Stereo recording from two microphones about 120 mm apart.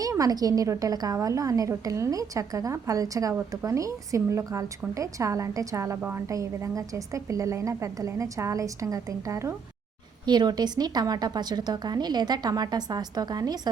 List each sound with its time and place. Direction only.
0.0 s a woman's voice: 30° right (ahead or behind)
10.2 s speech: 40° right (ahead or behind)